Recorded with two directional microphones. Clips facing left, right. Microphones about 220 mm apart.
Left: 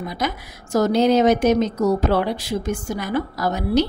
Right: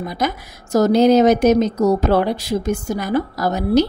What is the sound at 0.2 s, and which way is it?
A woman's voice, 40° right (ahead or behind).